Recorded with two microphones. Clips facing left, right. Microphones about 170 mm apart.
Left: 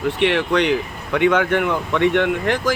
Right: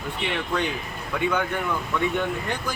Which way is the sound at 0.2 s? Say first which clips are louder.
Left 8 dB; 75° left (ahead or behind).